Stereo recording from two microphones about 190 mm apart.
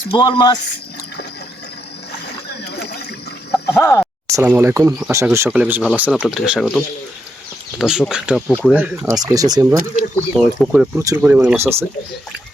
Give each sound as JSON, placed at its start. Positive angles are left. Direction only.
{"t": 0.1, "sound": "speech", "side_deg": 25}
{"t": 2.2, "sound": "a sound", "side_deg": 60}
{"t": 3.5, "sound": "liquid", "side_deg": 10}
{"t": 4.4, "sound": "speech", "side_deg": -15}
{"t": 9.1, "sound": "speech", "side_deg": -20}
{"t": 10.3, "sound": "speech", "side_deg": -5}